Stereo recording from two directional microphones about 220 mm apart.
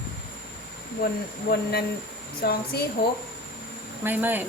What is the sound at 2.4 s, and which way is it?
Speech, 45° left (ahead or behind).